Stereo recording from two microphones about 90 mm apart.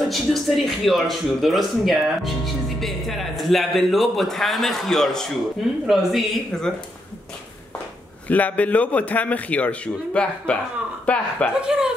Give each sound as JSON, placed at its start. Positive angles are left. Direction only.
{"t": 0.0, "sound": "speech", "side_deg": 0}
{"t": 8.3, "sound": "a man's voice", "side_deg": 15}
{"t": 11.6, "sound": "speech", "side_deg": -10}